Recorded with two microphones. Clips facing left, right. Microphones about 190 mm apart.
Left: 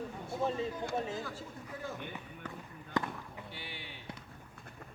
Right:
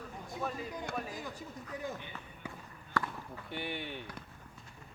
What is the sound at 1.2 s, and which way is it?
Speech, 15° right (ahead or behind).